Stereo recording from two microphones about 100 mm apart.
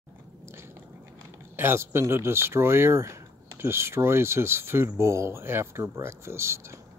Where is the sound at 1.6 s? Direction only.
25° right (ahead or behind).